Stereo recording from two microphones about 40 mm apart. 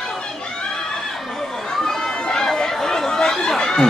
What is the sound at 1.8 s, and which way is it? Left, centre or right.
Chatter, centre.